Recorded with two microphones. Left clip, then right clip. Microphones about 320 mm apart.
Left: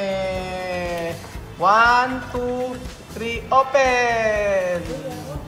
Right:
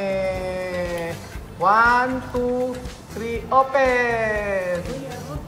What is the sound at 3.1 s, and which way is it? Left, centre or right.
Speech, centre.